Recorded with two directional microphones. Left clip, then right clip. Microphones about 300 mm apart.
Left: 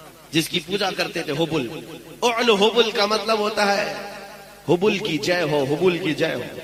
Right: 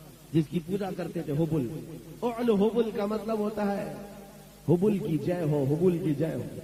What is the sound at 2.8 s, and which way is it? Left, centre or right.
A man's voice, centre.